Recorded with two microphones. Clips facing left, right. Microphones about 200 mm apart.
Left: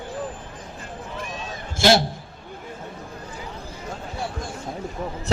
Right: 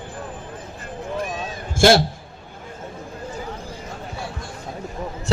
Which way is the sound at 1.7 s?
50° right (ahead or behind).